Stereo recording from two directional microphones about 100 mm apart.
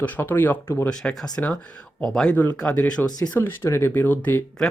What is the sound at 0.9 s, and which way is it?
Speech, 5° left (ahead or behind).